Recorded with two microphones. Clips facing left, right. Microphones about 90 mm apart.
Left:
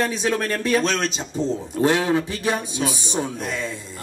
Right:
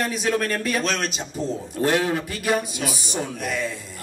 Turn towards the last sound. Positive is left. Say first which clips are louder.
# left 3 dB
turn(degrees=25)  # may be behind; listen again after turning